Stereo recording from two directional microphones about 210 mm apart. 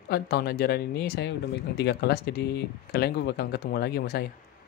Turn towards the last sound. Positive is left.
turn(degrees=50)  # may be behind; listen again after turning